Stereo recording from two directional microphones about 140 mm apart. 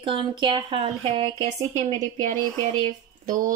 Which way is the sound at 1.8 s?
60° right (ahead or behind).